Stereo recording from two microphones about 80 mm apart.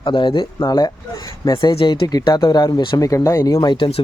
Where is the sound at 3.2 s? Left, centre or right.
Left.